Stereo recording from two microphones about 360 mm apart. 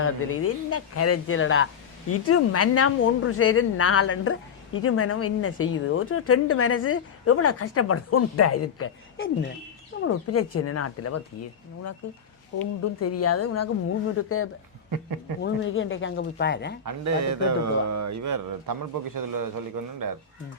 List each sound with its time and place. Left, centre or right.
0.0 s speech: left
12.8 s speech: left
16.8 s speech: right